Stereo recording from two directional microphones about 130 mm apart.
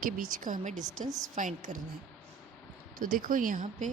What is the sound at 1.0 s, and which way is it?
Speech, 25° right (ahead or behind).